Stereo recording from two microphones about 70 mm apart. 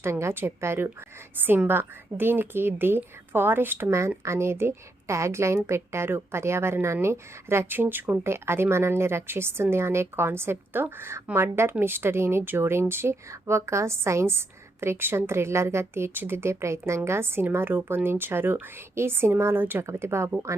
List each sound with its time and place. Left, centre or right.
0.0 s a woman's voice: right
4.2 s a woman's voice: right
19.8 s a woman's voice: right